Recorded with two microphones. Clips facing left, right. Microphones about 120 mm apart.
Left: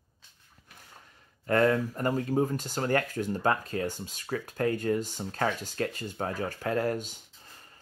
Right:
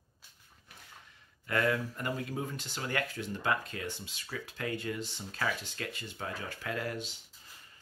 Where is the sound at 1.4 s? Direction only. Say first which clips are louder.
Left 6 dB; 40° left (ahead or behind).